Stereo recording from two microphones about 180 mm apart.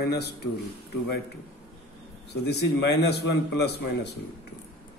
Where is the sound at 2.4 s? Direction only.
65° left (ahead or behind).